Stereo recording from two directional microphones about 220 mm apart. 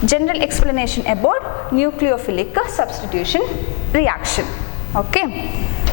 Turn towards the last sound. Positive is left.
turn(degrees=25)  # may be behind; listen again after turning